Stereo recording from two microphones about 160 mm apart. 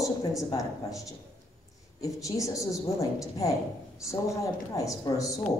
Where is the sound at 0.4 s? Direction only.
20° left (ahead or behind).